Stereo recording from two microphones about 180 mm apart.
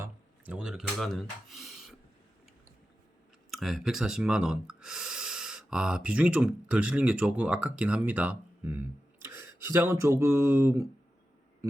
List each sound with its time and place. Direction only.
0.0 s speech: 10° right (ahead or behind)
3.5 s speech: centre (ahead or behind)
11.6 s a sound: 15° right (ahead or behind)